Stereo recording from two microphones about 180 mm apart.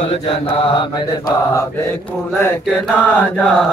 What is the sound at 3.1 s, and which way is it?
Chant, 10° left (ahead or behind).